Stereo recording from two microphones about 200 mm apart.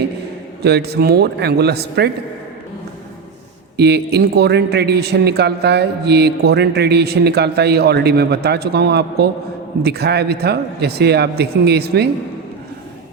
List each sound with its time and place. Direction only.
0.6 s speech: 55° right (ahead or behind)
3.8 s a man's voice: 55° right (ahead or behind)